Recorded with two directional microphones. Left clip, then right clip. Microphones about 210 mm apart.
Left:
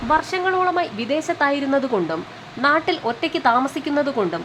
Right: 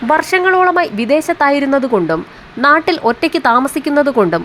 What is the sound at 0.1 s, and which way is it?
Speech, 25° right (ahead or behind).